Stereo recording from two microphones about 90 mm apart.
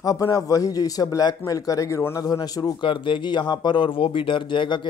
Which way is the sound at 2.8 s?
65° left (ahead or behind).